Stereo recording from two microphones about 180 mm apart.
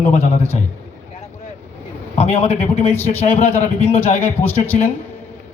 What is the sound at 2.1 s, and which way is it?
A man's voice, 35° left (ahead or behind).